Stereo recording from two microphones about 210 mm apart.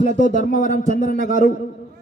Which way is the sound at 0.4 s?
40° left (ahead or behind).